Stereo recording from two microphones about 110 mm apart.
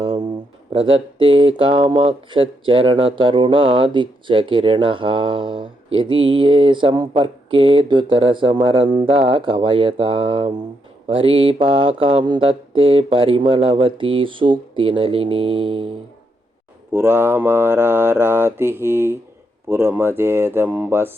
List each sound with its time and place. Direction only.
0.0 s a sound: 45° right (ahead or behind)
0.7 s speech: 55° right (ahead or behind)
16.9 s mantra: 20° right (ahead or behind)